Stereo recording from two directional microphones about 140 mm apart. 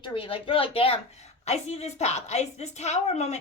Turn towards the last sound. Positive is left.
turn(degrees=50)  # may be behind; listen again after turning